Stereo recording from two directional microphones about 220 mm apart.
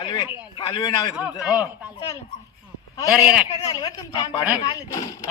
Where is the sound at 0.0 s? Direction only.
20° left (ahead or behind).